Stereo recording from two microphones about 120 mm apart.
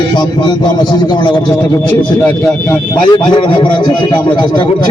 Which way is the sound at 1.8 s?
15° left (ahead or behind).